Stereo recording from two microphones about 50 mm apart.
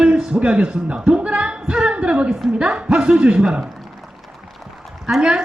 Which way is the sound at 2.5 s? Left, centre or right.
Centre.